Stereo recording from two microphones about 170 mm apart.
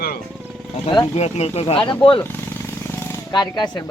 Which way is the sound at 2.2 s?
10° left (ahead or behind).